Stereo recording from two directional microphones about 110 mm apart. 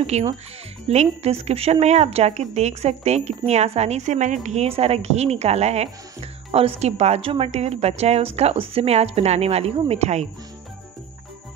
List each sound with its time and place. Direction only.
0.0 s a woman's voice: 80° right